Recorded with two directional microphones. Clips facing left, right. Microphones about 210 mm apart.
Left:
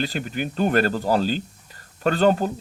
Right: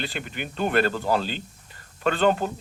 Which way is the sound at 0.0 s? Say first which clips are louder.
Left 6 dB; 40° left (ahead or behind).